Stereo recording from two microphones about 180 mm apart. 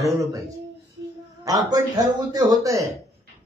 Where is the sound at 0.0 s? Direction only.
15° right (ahead or behind).